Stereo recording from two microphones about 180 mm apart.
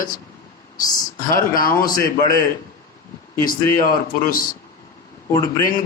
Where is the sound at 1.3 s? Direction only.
50° left (ahead or behind).